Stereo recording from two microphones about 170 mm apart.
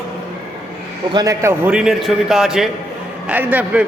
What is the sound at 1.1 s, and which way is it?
A man's voice, 20° right (ahead or behind).